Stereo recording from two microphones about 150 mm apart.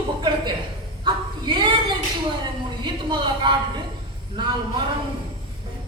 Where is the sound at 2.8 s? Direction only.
30° right (ahead or behind).